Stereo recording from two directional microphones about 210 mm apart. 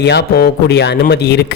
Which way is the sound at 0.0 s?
50° left (ahead or behind).